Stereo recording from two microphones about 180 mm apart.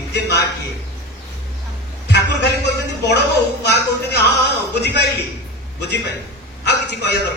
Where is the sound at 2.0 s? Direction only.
70° left (ahead or behind).